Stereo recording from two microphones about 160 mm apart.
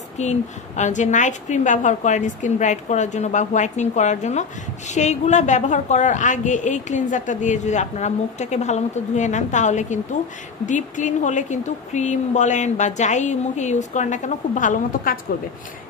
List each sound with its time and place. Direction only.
0.2 s a woman's voice: 45° left (ahead or behind)